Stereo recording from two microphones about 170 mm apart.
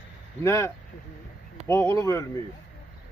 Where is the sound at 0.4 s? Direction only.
15° left (ahead or behind).